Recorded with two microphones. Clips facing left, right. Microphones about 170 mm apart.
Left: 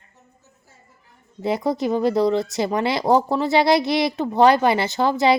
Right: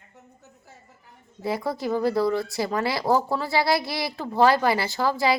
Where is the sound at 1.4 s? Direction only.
20° left (ahead or behind).